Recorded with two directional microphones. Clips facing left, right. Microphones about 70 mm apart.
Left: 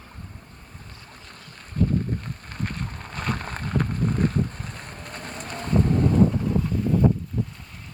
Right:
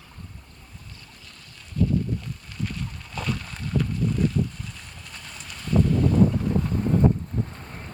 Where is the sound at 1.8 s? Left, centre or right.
Left.